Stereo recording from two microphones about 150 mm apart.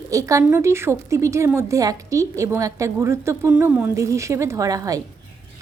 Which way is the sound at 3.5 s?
10° right (ahead or behind).